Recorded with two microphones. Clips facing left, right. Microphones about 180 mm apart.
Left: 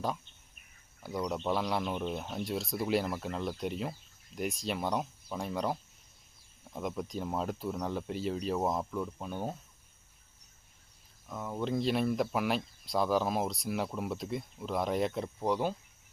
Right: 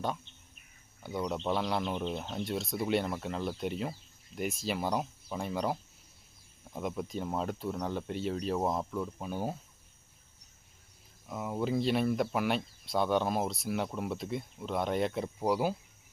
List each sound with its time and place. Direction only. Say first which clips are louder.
1.0 s speech: even; centre (ahead or behind)
11.3 s speech: right 2 dB; 10° right (ahead or behind)